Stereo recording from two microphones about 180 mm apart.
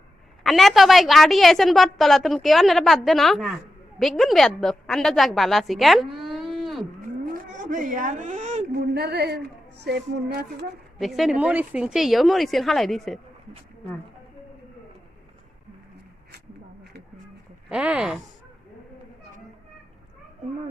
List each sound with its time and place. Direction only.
0.4 s a woman's voice: centre (ahead or behind)
7.3 s a sound: 50° right (ahead or behind)
8.7 s speech: 60° right (ahead or behind)
9.8 s a sound: 65° right (ahead or behind)
11.0 s a woman's voice: centre (ahead or behind)
17.7 s a woman's voice: 5° right (ahead or behind)